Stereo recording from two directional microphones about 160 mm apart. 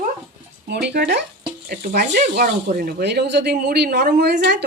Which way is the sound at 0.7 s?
90° right.